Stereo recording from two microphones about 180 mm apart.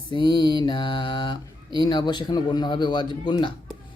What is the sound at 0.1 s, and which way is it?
Mantra, 25° left (ahead or behind).